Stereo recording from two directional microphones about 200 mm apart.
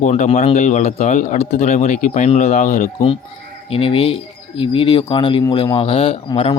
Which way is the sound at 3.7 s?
30° left (ahead or behind).